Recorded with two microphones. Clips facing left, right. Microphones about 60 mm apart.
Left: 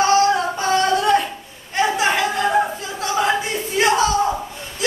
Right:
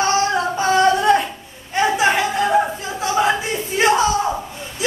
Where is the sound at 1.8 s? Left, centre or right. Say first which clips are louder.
Right 2 dB; centre.